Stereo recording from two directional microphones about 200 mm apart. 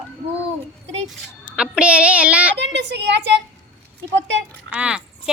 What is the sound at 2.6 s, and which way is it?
Speech, 60° right (ahead or behind).